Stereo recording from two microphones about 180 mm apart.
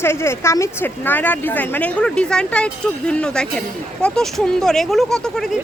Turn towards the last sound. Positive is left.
turn(degrees=0)  # may be behind; listen again after turning